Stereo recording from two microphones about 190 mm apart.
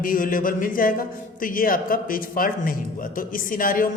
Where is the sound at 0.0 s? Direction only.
45° left (ahead or behind).